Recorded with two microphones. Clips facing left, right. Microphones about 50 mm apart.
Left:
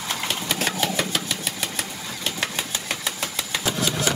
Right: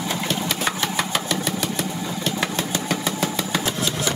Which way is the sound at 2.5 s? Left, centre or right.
Centre.